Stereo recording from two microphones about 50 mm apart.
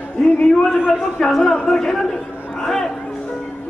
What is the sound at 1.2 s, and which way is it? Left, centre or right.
Speech, centre.